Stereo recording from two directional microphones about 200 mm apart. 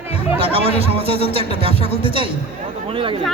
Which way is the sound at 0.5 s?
30° right (ahead or behind).